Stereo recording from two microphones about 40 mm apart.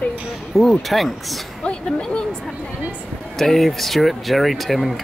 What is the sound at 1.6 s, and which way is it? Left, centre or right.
Speech, left.